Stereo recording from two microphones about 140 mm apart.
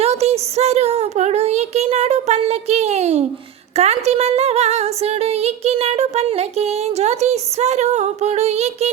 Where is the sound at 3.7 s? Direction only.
50° right (ahead or behind).